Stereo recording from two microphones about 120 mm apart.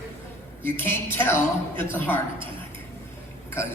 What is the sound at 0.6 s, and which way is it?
A man's voice, 20° left (ahead or behind).